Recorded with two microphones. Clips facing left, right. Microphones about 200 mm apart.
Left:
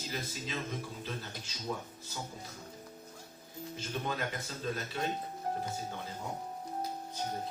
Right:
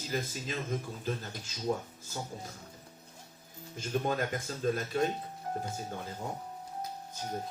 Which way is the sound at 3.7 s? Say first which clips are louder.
Right 6 dB; 45° right (ahead or behind).